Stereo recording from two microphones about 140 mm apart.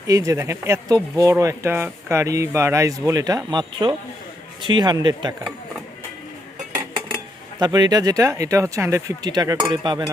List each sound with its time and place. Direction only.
0.1 s a man's voice: 25° right (ahead or behind)
7.6 s a man's voice: 30° right (ahead or behind)